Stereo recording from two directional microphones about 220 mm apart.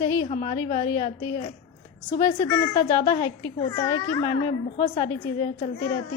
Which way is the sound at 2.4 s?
15° left (ahead or behind).